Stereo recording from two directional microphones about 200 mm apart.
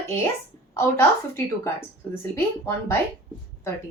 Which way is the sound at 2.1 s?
10° left (ahead or behind).